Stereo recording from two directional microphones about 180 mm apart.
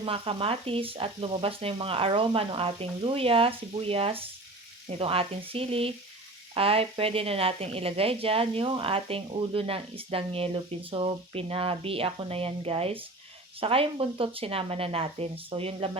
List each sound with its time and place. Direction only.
0.0 s speech: 30° right (ahead or behind)